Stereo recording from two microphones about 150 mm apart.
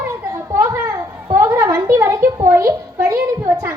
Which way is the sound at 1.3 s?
15° right (ahead or behind).